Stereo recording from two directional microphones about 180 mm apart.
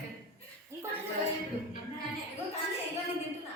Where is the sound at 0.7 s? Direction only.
15° right (ahead or behind).